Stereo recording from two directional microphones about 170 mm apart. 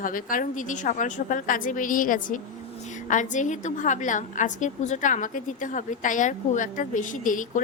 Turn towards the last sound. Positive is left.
turn(degrees=50)  # may be behind; listen again after turning